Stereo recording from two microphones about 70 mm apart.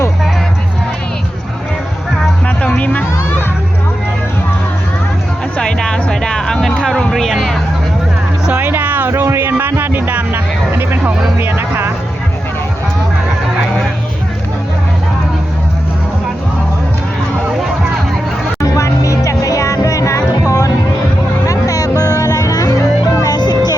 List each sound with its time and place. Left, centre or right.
2.6 s music: centre
5.5 s music: centre
8.4 s music: right
18.6 s music: left